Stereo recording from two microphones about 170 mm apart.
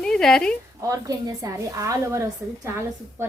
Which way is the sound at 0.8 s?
20° right (ahead or behind).